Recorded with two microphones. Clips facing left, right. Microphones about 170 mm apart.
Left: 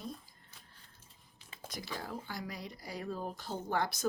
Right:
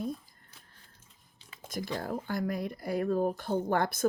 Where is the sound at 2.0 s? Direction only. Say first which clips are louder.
Right 9 dB; 50° right (ahead or behind).